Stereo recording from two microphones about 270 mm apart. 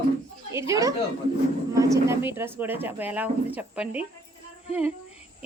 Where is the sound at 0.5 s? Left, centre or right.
Centre.